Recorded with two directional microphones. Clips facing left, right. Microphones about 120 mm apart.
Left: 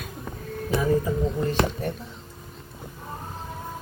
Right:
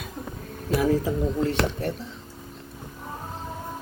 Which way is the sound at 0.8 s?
75° right (ahead or behind).